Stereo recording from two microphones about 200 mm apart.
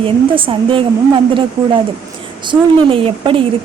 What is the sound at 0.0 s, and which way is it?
Speech, 25° right (ahead or behind).